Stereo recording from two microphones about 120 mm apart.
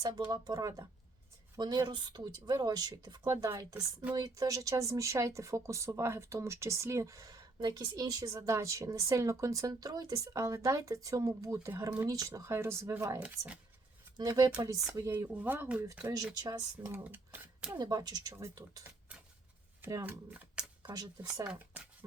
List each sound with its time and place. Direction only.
0.3 s speech: 30° right (ahead or behind)
14.2 s speech: 30° right (ahead or behind)
15.3 s speech: 15° right (ahead or behind)
16.3 s speech: 30° right (ahead or behind); by 17.7 s 15° right (ahead or behind)
17.7 s speech: 30° right (ahead or behind)
20.0 s speech: 15° right (ahead or behind)
20.8 s speech: 35° right (ahead or behind)
21.5 s speech: 10° right (ahead or behind)